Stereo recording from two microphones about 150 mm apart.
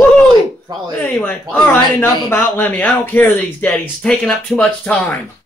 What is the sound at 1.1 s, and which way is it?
Speech, 10° left (ahead or behind).